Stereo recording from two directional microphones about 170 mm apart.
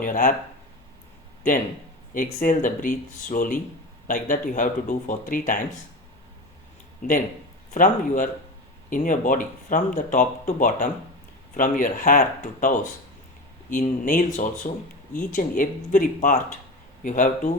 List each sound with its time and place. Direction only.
0.0 s speech: 50° left (ahead or behind)
2.1 s speech: 50° left (ahead or behind)
7.0 s speech: 55° left (ahead or behind)